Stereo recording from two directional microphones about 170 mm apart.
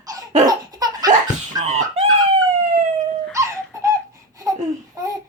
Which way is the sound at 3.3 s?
20° right (ahead or behind).